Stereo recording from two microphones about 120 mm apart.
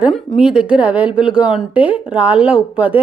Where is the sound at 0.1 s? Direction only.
5° right (ahead or behind).